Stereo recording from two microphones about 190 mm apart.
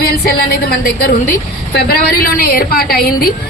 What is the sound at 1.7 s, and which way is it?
A woman's voice, 50° left (ahead or behind).